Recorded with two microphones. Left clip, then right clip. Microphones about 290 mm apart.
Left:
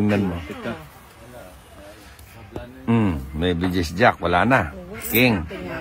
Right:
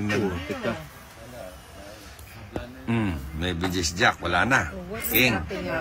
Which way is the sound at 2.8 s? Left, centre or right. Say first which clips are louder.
Left 7 dB; centre.